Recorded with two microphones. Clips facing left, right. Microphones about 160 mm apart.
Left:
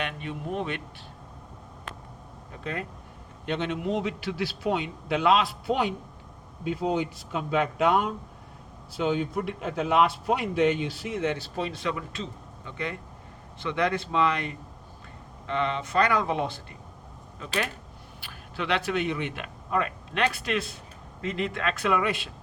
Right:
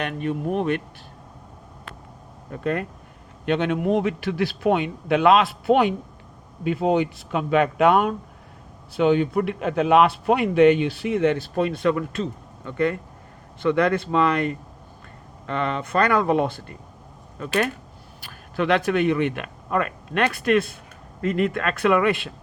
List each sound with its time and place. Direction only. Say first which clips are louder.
0.0 s speech: right 7 dB; 45° right (ahead or behind)
2.5 s a man's voice: right 9 dB; 55° right (ahead or behind)